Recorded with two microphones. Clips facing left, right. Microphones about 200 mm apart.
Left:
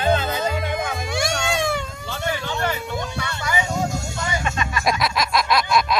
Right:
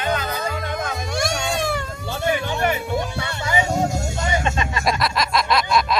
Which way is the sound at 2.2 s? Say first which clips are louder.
Right 4 dB; 20° right (ahead or behind).